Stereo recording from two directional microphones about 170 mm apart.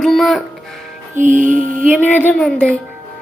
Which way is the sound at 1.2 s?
50° right (ahead or behind).